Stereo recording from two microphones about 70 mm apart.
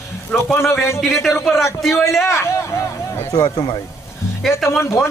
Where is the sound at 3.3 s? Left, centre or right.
Left.